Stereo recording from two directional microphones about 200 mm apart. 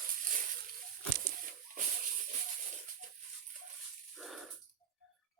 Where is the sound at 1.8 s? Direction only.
40° right (ahead or behind).